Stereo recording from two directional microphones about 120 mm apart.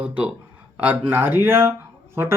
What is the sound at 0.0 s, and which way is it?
Speech, 10° right (ahead or behind).